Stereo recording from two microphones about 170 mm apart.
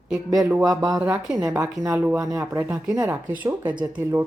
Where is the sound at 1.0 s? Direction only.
5° right (ahead or behind).